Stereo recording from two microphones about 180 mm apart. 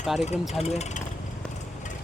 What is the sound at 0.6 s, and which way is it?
Speech, 35° left (ahead or behind).